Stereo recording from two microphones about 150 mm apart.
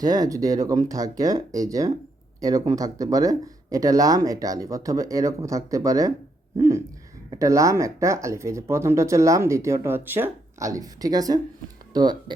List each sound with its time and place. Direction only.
0.0 s speech: 25° right (ahead or behind)